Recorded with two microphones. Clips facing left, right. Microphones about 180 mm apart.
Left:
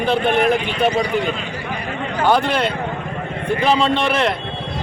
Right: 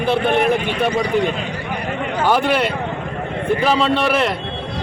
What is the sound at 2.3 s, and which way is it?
Speech, 10° right (ahead or behind).